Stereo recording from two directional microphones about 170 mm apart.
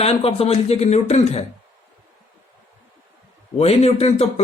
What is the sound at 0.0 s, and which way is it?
Speech, 35° left (ahead or behind).